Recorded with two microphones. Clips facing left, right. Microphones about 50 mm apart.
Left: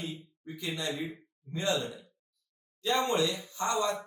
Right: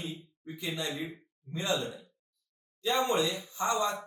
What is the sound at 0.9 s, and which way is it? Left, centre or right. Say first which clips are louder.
Speech: left 1 dB; centre.